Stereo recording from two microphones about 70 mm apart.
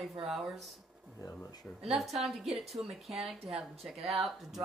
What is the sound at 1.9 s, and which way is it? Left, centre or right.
Speech, centre.